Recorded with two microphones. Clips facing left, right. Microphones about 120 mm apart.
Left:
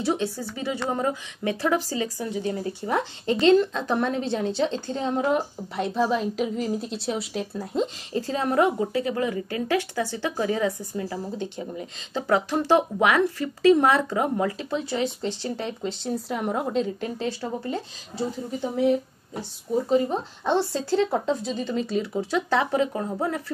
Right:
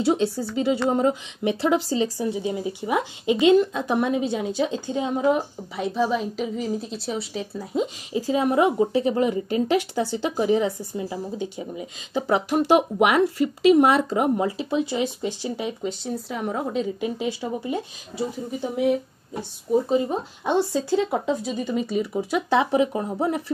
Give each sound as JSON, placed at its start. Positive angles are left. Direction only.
{"t": 0.0, "sound": "a woman's voice", "side_deg": -15}
{"t": 17.0, "sound": "a woman's voice", "side_deg": -10}
{"t": 19.9, "sound": "a woman's voice", "side_deg": -15}
{"t": 22.5, "sound": "a woman's voice", "side_deg": -15}